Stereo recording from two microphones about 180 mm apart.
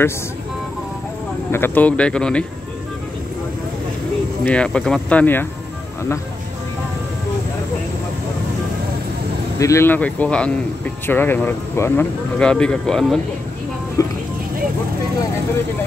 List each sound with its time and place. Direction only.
1.5 s speech: 10° left (ahead or behind)
4.5 s speech: 5° left (ahead or behind)
9.6 s speech: 15° left (ahead or behind)
14.0 s speech: 20° left (ahead or behind)